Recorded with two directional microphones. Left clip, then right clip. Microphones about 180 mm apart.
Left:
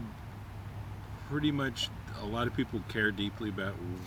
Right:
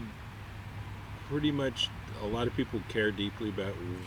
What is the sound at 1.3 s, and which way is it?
Speech, 25° left (ahead or behind).